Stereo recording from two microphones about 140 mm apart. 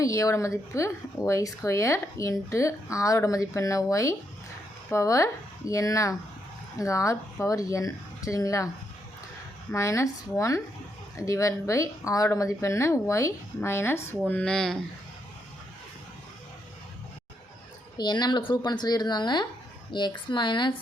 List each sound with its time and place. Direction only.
0.0 s speech: 25° left (ahead or behind)
9.7 s speech: 20° left (ahead or behind); by 14.8 s 5° left (ahead or behind)
17.9 s speech: 30° left (ahead or behind)